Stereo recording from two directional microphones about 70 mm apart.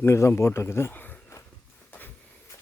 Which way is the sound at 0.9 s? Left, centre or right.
Left.